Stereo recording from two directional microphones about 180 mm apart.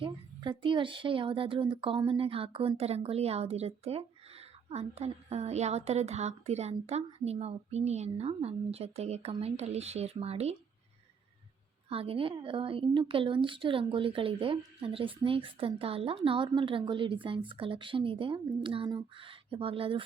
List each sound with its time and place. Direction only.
0.0 s speech: 30° right (ahead or behind)
11.9 s a woman's voice: 30° right (ahead or behind)